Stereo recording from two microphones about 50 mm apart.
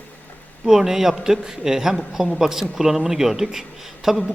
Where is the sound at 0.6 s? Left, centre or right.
Centre.